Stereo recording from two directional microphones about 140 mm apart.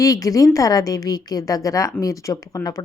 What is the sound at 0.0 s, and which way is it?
A woman's voice, 25° left (ahead or behind).